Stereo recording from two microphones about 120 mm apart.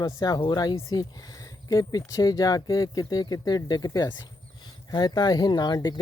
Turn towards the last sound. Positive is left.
turn(degrees=35)  # may be behind; listen again after turning